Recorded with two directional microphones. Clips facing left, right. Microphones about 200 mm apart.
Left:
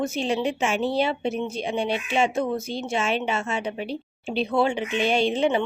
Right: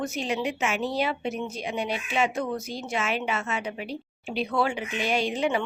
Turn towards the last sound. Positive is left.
turn(degrees=25)  # may be behind; listen again after turning